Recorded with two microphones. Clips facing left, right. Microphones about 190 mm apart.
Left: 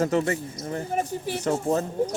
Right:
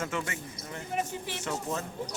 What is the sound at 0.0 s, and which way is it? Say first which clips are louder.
Speech: left 11 dB; 40° left (ahead or behind).